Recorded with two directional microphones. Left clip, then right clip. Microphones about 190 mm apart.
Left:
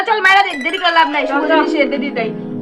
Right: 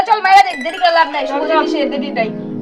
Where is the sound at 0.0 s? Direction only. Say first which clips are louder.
Right 1 dB; 15° right (ahead or behind).